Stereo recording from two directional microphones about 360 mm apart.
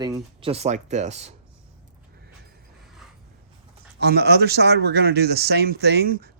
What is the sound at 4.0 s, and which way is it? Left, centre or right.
Speech, right.